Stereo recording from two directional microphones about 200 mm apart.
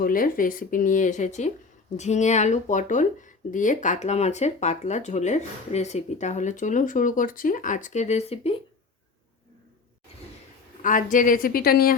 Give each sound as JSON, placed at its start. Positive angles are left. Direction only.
{"t": 0.0, "sound": "speech", "side_deg": 45}
{"t": 10.8, "sound": "speech", "side_deg": 40}